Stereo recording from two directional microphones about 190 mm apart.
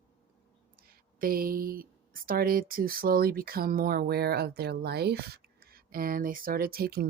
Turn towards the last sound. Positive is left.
turn(degrees=-55)  # may be behind; listen again after turning